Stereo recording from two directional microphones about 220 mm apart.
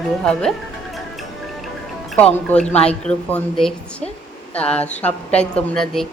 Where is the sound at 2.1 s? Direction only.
5° left (ahead or behind).